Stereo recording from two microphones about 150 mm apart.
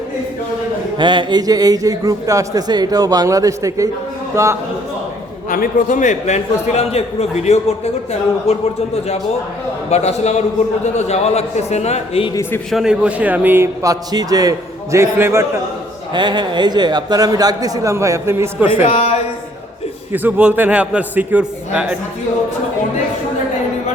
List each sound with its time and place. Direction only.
0.9 s speech: 30° right (ahead or behind)
5.5 s a man's voice: 65° left (ahead or behind); by 8.6 s 45° left (ahead or behind)
9.9 s a man's voice: 45° left (ahead or behind)
12.3 s a man's voice: 20° left (ahead or behind)
12.7 s a man's voice: 5° right (ahead or behind)
16.1 s speech: 30° right (ahead or behind)
18.7 s a man's voice: 45° left (ahead or behind)
20.1 s a man's voice: 10° right (ahead or behind)